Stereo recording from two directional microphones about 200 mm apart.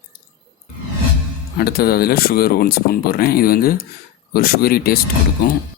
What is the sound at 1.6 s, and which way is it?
Speech, 50° left (ahead or behind).